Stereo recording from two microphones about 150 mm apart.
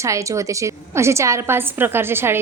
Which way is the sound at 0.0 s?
20° right (ahead or behind).